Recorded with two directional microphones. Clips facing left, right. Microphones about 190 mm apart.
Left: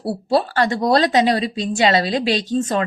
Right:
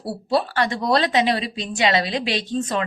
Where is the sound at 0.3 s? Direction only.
40° left (ahead or behind).